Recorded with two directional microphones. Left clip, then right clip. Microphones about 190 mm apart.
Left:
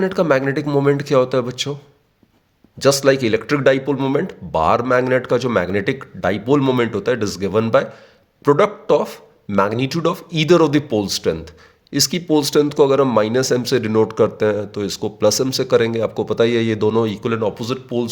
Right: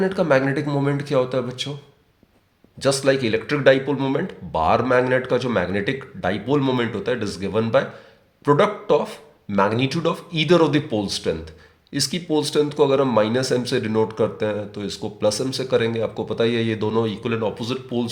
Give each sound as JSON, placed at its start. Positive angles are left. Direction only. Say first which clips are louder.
{"t": 0.0, "sound": "speech", "louder": "left 2 dB", "side_deg": 50}
{"t": 2.7, "sound": "speech", "louder": "left 5 dB", "side_deg": 50}